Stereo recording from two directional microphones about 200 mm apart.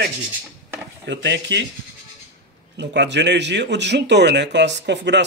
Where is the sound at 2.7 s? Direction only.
60° right (ahead or behind).